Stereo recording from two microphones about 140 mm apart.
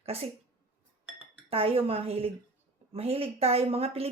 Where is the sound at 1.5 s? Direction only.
45° right (ahead or behind).